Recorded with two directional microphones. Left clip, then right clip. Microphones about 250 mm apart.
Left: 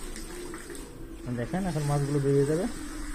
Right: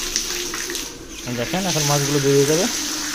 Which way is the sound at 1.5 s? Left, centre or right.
Centre.